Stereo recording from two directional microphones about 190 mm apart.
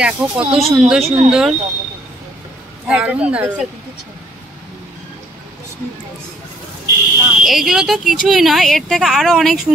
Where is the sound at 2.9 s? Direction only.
5° right (ahead or behind).